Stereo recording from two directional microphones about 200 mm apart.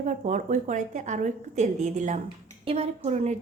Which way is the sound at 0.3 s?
40° right (ahead or behind).